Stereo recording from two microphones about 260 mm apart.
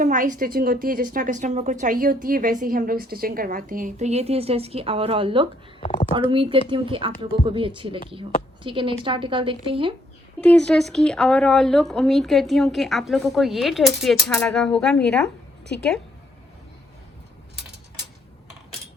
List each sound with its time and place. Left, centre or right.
0.0 s a woman's voice: right
5.8 s speech: left
6.3 s a woman's voice: centre
10.4 s speech: centre